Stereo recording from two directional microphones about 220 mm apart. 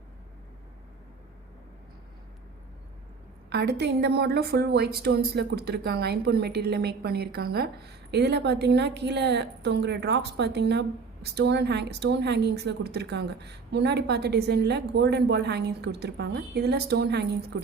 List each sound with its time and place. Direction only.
3.5 s a woman's voice: 50° right (ahead or behind)